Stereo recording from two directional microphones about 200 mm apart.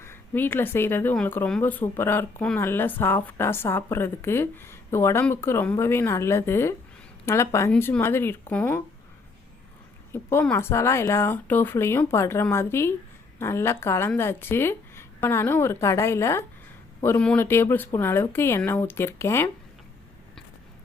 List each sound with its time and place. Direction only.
0.0 s speech: 10° left (ahead or behind)
10.1 s speech: 10° left (ahead or behind)